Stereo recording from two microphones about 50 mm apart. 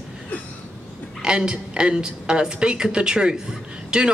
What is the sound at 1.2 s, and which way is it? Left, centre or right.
Speech, centre.